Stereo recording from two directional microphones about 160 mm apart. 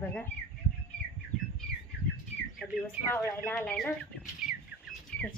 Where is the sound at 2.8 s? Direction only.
10° left (ahead or behind).